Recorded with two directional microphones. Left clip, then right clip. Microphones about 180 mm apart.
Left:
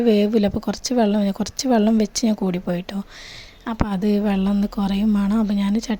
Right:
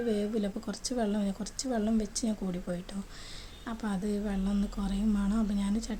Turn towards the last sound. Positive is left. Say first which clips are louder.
# left 11 dB
turn(degrees=40)  # may be behind; listen again after turning